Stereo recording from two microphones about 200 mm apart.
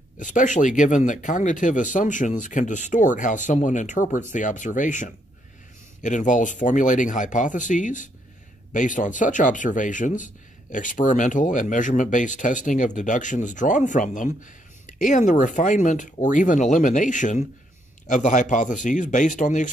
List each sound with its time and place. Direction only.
0.2 s speech: 40° left (ahead or behind)